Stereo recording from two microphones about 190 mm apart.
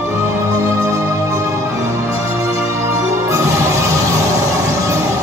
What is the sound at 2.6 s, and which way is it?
Music, 15° right (ahead or behind).